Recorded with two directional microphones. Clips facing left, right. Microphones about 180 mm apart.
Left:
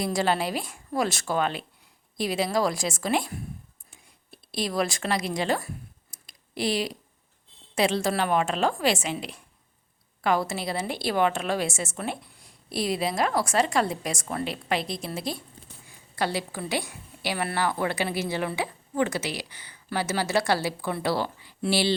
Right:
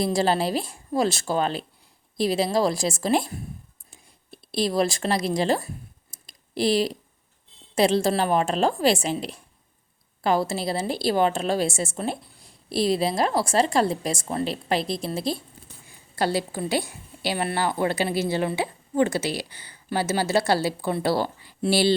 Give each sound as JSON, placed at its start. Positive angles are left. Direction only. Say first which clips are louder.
{"t": 0.0, "sound": "a woman's voice", "louder": "right 3 dB", "side_deg": -30}
{"t": 3.9, "sound": "a sound", "louder": "right 5 dB", "side_deg": -30}
{"t": 7.8, "sound": "a woman's voice", "louder": "right 4 dB", "side_deg": -35}